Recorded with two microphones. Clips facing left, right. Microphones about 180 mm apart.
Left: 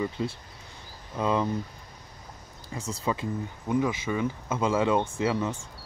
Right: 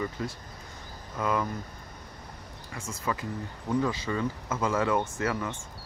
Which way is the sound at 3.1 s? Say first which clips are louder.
Left 3 dB; 20° left (ahead or behind).